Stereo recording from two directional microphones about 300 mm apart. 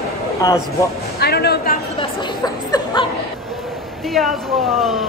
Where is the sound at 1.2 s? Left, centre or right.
Left.